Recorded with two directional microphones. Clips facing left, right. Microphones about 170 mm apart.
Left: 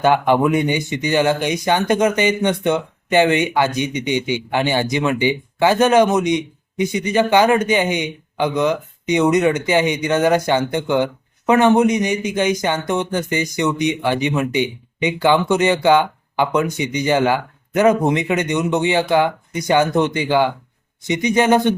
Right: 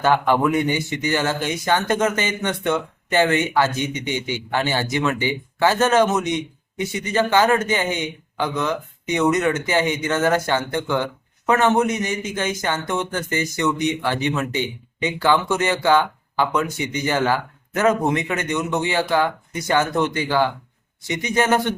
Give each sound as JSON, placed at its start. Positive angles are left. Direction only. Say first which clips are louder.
{"t": 0.0, "sound": "a man's voice", "louder": "left 3 dB", "side_deg": 20}